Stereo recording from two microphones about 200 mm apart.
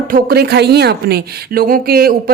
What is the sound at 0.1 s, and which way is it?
A woman's voice, 50° right (ahead or behind).